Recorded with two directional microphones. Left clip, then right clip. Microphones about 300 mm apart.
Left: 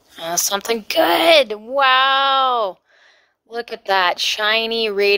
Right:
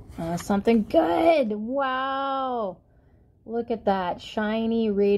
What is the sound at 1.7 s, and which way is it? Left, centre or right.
Speech, left.